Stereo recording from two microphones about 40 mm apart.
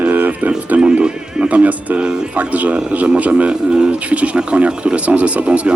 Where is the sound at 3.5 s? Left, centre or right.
Right.